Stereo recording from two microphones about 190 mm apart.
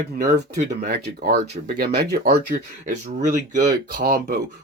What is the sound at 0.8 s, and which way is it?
Speech, 55° right (ahead or behind).